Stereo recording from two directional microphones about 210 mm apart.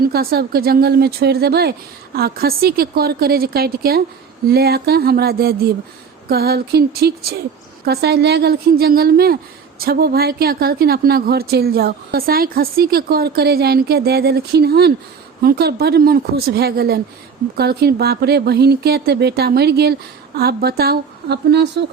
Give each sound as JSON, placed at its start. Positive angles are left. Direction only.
{"t": 0.0, "sound": "a woman's voice", "side_deg": -45}